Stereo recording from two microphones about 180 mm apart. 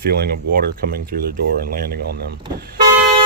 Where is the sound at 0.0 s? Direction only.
60° right (ahead or behind).